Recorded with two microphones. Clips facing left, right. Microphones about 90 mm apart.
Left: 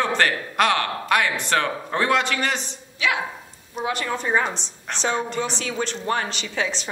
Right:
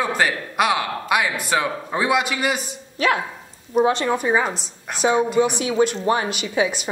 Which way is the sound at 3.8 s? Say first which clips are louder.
Right 8 dB; 25° right (ahead or behind).